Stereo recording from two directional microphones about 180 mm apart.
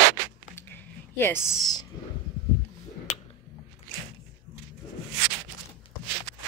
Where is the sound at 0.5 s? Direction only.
10° left (ahead or behind).